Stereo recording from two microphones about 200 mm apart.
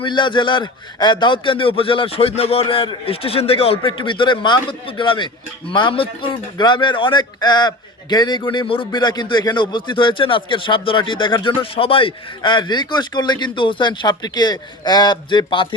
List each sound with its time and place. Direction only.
0.0 s a man's voice: 25° left (ahead or behind)